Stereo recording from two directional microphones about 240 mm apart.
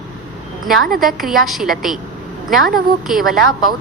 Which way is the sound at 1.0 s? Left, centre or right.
Centre.